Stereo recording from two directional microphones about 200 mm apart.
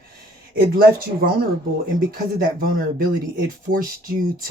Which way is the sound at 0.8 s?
45° right (ahead or behind).